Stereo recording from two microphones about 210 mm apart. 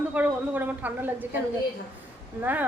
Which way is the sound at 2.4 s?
10° right (ahead or behind).